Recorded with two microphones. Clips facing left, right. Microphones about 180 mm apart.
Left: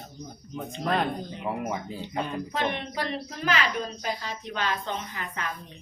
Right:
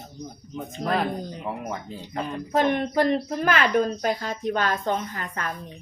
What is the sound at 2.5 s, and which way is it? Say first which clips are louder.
A woman's voice: right 8 dB; 45° right (ahead or behind).